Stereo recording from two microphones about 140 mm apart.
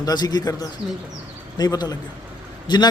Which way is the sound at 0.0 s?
30° left (ahead or behind).